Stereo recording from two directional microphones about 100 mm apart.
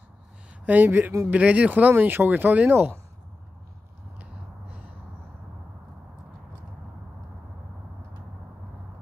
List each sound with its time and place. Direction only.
0.7 s speech: 20° right (ahead or behind)